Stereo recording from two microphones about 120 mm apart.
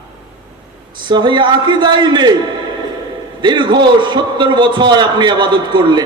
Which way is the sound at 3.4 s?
40° right (ahead or behind).